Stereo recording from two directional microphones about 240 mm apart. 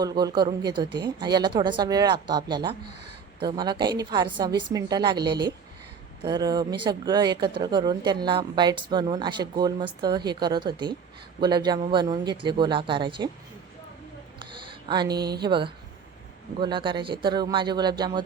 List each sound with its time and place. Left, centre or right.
0.0 s speech: centre
14.7 s speech: centre